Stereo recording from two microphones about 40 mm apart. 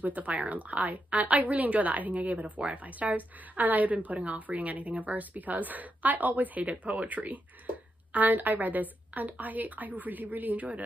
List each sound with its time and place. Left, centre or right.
0.0 s a woman's voice: right